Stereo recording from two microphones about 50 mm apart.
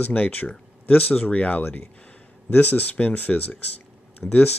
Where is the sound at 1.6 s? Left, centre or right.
Left.